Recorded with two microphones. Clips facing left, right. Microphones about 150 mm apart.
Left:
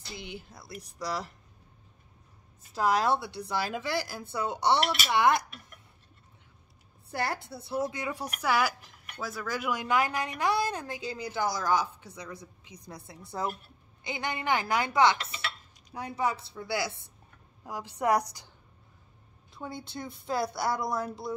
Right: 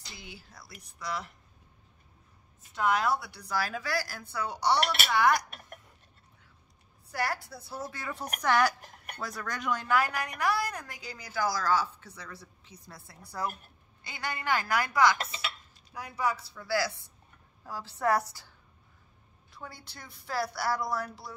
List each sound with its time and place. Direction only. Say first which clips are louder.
0.3 s a woman's voice: left 6 dB; 20° left (ahead or behind)
0.7 s speech: left 3 dB; 35° left (ahead or behind)
2.7 s a woman's voice: left 2 dB; 35° left (ahead or behind)
7.1 s a woman's voice: left 1 dB; 25° left (ahead or behind)
19.5 s a woman's voice: left 8 dB; 25° left (ahead or behind)